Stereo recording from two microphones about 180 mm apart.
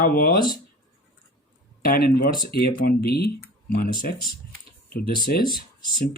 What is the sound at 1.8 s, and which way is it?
Speech, 50° left (ahead or behind).